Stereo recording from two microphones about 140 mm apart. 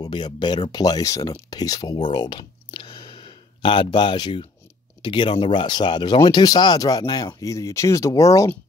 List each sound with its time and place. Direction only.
0.0 s speech: 30° left (ahead or behind)